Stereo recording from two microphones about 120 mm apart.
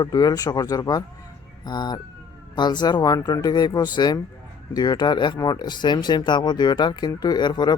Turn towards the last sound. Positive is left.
turn(degrees=40)  # may be behind; listen again after turning